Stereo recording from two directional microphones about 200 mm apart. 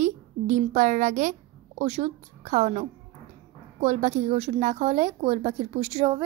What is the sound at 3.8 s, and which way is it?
A woman's voice, 35° right (ahead or behind).